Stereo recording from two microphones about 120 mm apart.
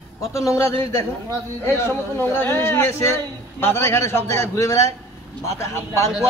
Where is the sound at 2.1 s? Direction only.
20° left (ahead or behind).